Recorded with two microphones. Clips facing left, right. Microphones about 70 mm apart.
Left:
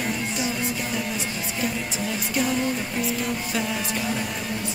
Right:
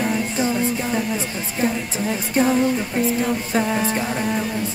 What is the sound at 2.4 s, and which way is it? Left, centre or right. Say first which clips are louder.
Music: right 7 dB; right.